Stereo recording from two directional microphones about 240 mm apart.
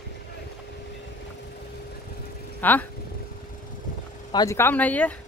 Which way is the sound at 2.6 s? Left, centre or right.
Centre.